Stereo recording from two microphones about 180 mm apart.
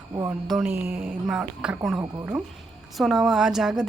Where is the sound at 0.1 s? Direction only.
20° right (ahead or behind).